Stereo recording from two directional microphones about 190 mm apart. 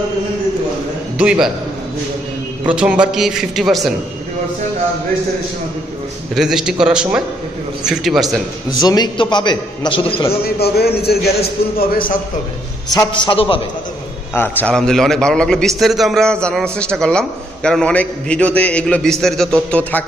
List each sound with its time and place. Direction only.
1.1 s a man's voice: 5° right (ahead or behind)
2.6 s a man's voice: 5° right (ahead or behind)
6.3 s a man's voice: 5° right (ahead or behind)
8.8 s a man's voice: 20° left (ahead or behind)
10.4 s a man's voice: 55° left (ahead or behind)
12.9 s a man's voice: 20° left (ahead or behind)
14.3 s a man's voice: 10° left (ahead or behind)